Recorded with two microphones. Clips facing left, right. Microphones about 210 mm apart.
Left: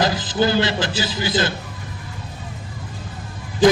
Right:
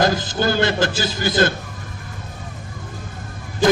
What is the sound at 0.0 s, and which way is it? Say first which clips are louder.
A man's voice: even; 50° right (ahead or behind).